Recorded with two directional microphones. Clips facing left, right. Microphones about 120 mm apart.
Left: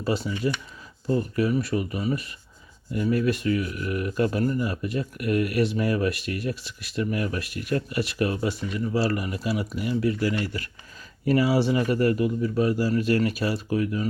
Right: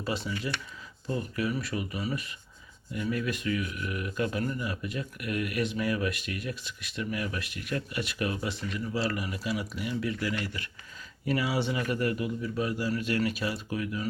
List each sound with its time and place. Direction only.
0.4 s speech: 30° left (ahead or behind)